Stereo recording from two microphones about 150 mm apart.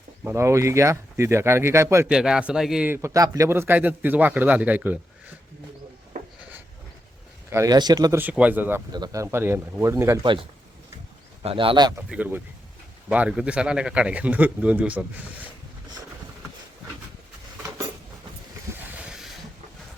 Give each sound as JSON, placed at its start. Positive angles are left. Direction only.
{"t": 0.3, "sound": "speech", "side_deg": -20}
{"t": 2.0, "sound": "speech", "side_deg": -5}
{"t": 7.5, "sound": "a man's voice", "side_deg": -25}
{"t": 8.2, "sound": "speech", "side_deg": -10}
{"t": 8.9, "sound": "a man's voice", "side_deg": -25}
{"t": 11.4, "sound": "speech", "side_deg": -35}
{"t": 11.9, "sound": "speech", "side_deg": -10}
{"t": 18.9, "sound": "a sound", "side_deg": -5}